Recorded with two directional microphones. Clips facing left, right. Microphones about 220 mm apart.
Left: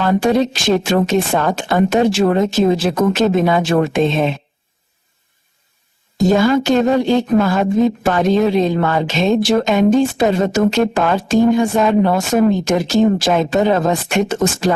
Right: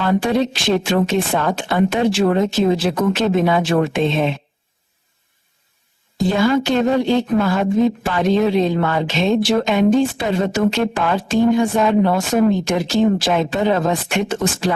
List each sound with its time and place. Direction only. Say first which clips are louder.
0.0 s speech: left 3 dB; 45° left (ahead or behind)
6.1 s speech: left 3 dB; 45° left (ahead or behind)